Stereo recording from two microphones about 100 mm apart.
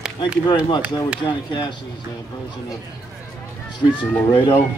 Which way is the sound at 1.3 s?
50° left (ahead or behind).